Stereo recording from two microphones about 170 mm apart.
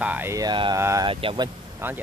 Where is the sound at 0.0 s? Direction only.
10° right (ahead or behind); by 1.5 s 25° right (ahead or behind).